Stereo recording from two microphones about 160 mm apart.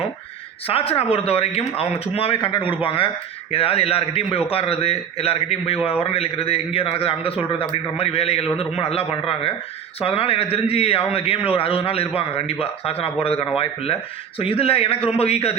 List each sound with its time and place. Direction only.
0.7 s a man's voice: 40° left (ahead or behind)
14.3 s a man's voice: 35° left (ahead or behind)